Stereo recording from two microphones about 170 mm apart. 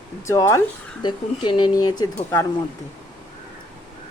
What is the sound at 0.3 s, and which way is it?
Speech, 20° left (ahead or behind).